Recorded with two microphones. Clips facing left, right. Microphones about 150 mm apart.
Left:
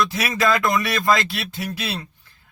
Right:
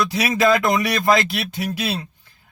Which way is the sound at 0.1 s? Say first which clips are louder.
Right 3 dB; 20° right (ahead or behind).